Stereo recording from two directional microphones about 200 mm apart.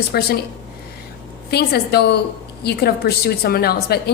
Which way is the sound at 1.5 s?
50° left (ahead or behind).